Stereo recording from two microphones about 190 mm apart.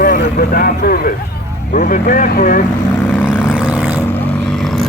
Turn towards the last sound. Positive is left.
turn(degrees=-5)  # may be behind; listen again after turning